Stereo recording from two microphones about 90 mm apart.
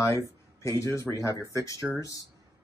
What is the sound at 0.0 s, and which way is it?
Speech, 35° left (ahead or behind).